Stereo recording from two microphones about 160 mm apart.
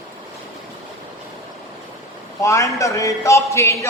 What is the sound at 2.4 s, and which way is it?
A man's voice, 20° left (ahead or behind).